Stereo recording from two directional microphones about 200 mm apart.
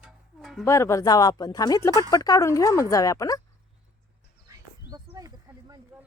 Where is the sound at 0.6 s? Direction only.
15° left (ahead or behind).